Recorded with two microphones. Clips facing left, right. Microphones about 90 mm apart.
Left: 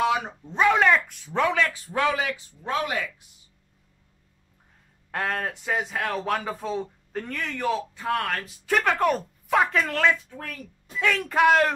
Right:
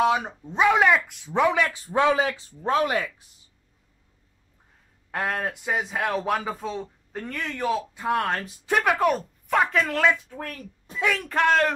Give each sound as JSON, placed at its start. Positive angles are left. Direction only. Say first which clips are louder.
{"t": 0.1, "sound": "speech", "louder": "right 1 dB", "side_deg": -10}
{"t": 1.9, "sound": "speech", "louder": "right 4 dB", "side_deg": -30}
{"t": 5.1, "sound": "speech", "louder": "right 1 dB", "side_deg": -5}
{"t": 8.9, "sound": "speech", "louder": "right 1 dB", "side_deg": 0}